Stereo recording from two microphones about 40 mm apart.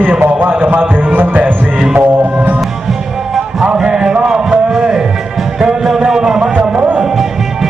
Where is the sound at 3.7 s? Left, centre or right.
Right.